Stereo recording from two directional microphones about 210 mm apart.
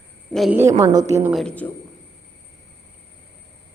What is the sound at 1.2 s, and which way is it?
Speech, centre (ahead or behind).